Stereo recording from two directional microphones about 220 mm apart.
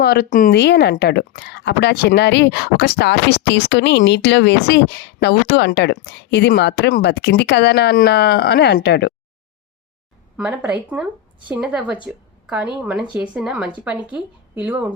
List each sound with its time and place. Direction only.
0.0 s a woman's voice: 45° left (ahead or behind)
10.3 s a woman's voice: 5° right (ahead or behind)